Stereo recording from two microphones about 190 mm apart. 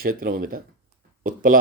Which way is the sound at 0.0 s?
50° right (ahead or behind).